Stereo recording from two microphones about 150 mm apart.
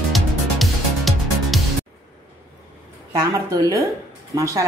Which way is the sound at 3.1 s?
20° right (ahead or behind).